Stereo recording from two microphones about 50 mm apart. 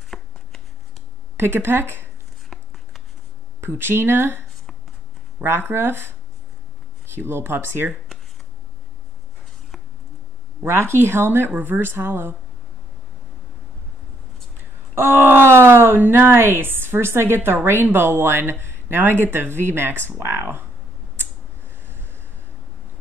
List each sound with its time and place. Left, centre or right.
0.1 s shuffling cards: centre
1.3 s speech: right
2.5 s writing: centre
3.6 s speech: right
10.6 s speech: right
14.6 s speech: right
21.2 s a sound: right